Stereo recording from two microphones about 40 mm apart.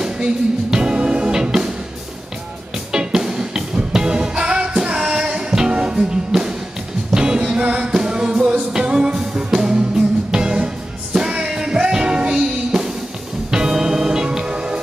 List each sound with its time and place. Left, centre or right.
0.0 s music: centre
2.9 s music: centre
6.3 s music: centre